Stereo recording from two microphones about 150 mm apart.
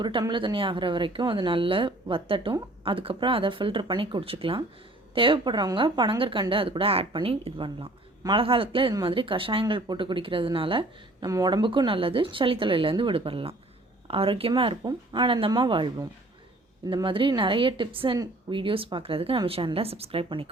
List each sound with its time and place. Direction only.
0.0 s a woman's voice: 30° right (ahead or behind)
11.3 s a woman's voice: 25° right (ahead or behind)